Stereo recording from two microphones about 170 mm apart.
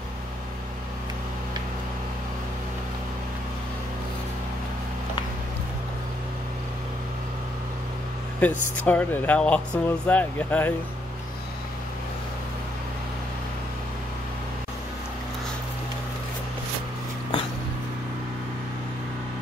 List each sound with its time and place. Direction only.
8.4 s speech: 10° left (ahead or behind)